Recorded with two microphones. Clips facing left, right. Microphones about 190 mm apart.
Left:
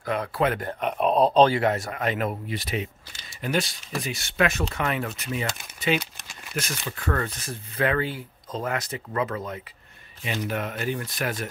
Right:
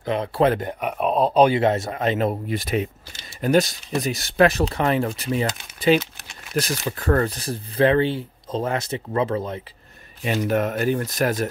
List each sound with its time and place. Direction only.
0.0 s speech: 25° right (ahead or behind)
0.6 s speech: 15° right (ahead or behind)
1.5 s speech: 25° right (ahead or behind)
2.4 s speech: 50° right (ahead or behind); by 9.6 s 30° right (ahead or behind)
10.2 s speech: 50° right (ahead or behind)